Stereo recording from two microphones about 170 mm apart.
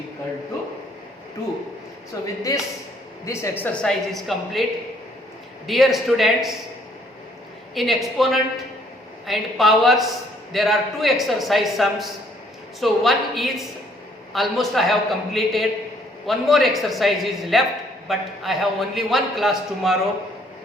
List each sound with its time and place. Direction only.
2.2 s speech: 20° left (ahead or behind); by 4.6 s centre (ahead or behind)
5.6 s a man's voice: centre (ahead or behind)
7.8 s a man's voice: centre (ahead or behind)